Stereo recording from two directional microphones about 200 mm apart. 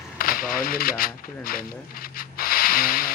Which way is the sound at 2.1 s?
45° left (ahead or behind).